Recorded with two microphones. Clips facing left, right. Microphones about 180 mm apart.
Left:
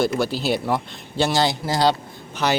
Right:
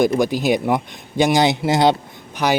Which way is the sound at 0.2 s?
15° right (ahead or behind).